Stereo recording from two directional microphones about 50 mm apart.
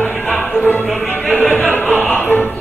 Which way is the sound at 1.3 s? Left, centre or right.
Left.